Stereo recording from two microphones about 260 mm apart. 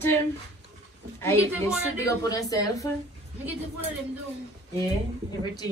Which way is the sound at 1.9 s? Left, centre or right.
Centre.